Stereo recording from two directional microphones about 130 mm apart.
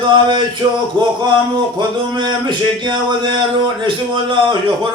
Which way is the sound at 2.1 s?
35° right (ahead or behind).